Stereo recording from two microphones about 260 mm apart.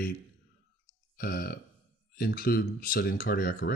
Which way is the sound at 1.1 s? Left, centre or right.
Left.